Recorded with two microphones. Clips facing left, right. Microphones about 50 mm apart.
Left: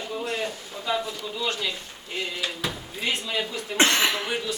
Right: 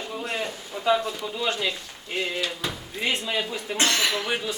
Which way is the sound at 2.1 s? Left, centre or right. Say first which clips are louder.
Right 3 dB; right.